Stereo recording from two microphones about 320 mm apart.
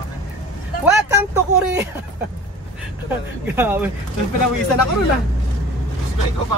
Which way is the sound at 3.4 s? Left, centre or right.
Centre.